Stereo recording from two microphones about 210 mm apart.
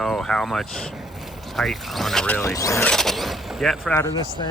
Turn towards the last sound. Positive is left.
turn(degrees=10)  # may be behind; listen again after turning